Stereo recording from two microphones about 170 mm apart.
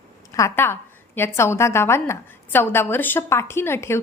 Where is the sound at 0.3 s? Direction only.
15° left (ahead or behind).